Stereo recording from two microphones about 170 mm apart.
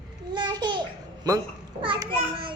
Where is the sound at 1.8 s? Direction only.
30° right (ahead or behind).